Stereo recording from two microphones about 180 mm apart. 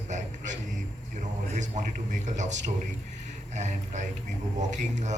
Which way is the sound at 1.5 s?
40° right (ahead or behind).